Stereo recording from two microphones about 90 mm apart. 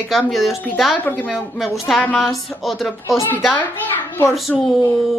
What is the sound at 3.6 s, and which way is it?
Speech, 25° left (ahead or behind).